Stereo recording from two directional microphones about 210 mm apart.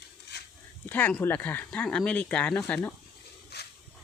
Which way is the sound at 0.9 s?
10° left (ahead or behind).